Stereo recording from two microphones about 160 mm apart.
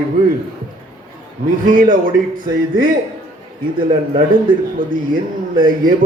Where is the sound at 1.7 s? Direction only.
60° right (ahead or behind).